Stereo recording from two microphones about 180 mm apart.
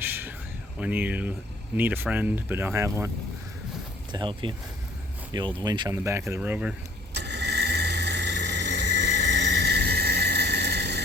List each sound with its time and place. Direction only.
0.0 s a sound: 10° right (ahead or behind)
0.8 s speech: 10° right (ahead or behind)
4.1 s speech: 25° right (ahead or behind)
5.6 s speech: 25° right (ahead or behind); by 6.7 s 5° right (ahead or behind)
7.1 s vehicle: 70° right (ahead or behind)